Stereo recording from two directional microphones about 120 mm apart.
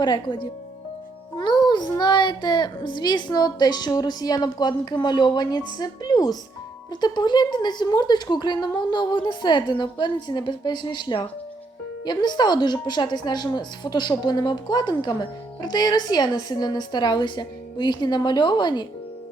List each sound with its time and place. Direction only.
0.0 s speech: 40° left (ahead or behind)